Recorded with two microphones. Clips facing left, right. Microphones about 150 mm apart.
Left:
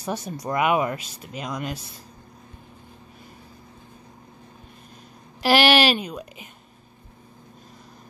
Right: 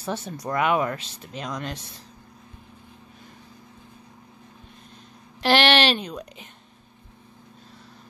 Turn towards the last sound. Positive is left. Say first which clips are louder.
# left 1 dB
turn(degrees=5)  # may be behind; listen again after turning